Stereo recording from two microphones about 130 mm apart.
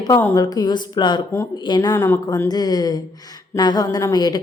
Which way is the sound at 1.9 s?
20° left (ahead or behind).